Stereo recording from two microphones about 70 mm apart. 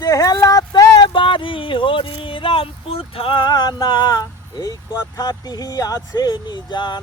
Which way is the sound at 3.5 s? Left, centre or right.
Left.